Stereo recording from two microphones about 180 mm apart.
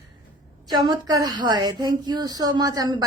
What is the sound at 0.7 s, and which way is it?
A woman's voice, 25° right (ahead or behind).